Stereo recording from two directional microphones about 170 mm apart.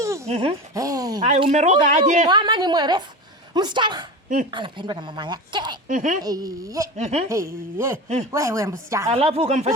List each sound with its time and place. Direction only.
0.3 s speech: 35° right (ahead or behind)
0.7 s speech: 20° right (ahead or behind)
1.4 s speech: 30° right (ahead or behind)
1.6 s speech: 50° right (ahead or behind)
2.2 s speech: 25° right (ahead or behind)
5.9 s speech: 50° right (ahead or behind)
6.2 s speech: 20° right (ahead or behind)
6.9 s speech: 40° right (ahead or behind)
7.3 s speech: 15° right (ahead or behind)
9.1 s speech: 35° right (ahead or behind)